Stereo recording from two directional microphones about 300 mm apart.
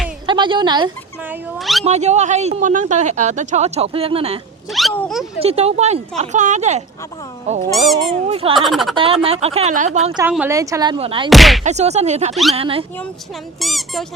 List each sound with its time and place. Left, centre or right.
0.3 s a woman's voice: centre
1.3 s speech: centre
1.8 s speech: right
4.7 s speech: centre
5.4 s speech: right
8.3 s speech: centre
8.5 s speech: centre
9.0 s speech: centre
10.2 s speech: centre
11.3 s speech: centre
11.6 s speech: right
12.3 s speech: centre
12.5 s speech: centre
13.6 s speech: centre